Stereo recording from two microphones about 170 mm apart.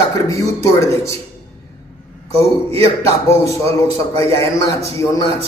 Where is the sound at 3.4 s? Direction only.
20° left (ahead or behind).